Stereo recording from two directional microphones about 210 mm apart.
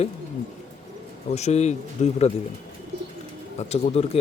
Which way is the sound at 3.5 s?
30° left (ahead or behind).